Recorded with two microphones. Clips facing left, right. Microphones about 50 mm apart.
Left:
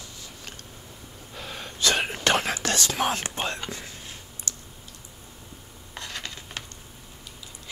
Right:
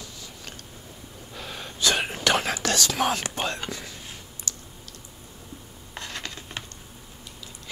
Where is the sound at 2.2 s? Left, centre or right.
Left.